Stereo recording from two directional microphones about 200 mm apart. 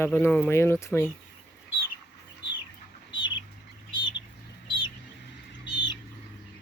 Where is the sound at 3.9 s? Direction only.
25° left (ahead or behind).